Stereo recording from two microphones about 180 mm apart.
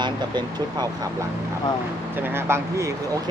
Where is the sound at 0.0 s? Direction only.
25° right (ahead or behind).